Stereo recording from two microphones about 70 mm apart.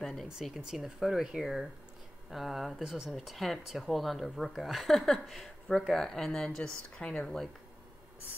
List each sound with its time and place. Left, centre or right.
0.0 s speech: centre
0.6 s speech: centre